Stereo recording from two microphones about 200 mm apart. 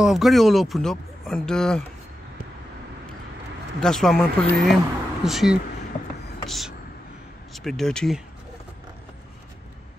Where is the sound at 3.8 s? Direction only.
5° left (ahead or behind).